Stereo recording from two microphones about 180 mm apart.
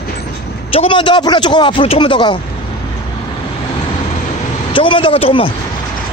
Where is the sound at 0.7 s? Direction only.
30° left (ahead or behind).